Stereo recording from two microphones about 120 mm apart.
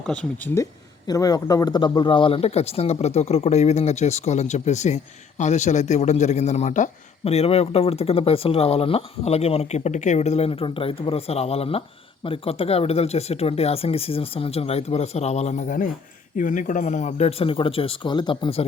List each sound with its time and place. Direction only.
0.1 s speech: 10° left (ahead or behind)
0.5 s speech: 30° left (ahead or behind)